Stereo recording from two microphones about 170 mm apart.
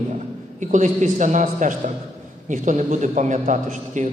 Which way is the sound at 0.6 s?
45° right (ahead or behind).